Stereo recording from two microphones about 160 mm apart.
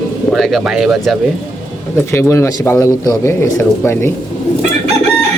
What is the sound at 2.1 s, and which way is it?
Speech, 15° left (ahead or behind).